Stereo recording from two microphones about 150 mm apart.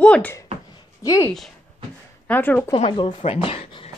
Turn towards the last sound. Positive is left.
turn(degrees=40)  # may be behind; listen again after turning